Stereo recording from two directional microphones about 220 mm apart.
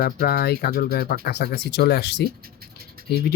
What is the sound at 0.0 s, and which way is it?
Speech, 45° left (ahead or behind).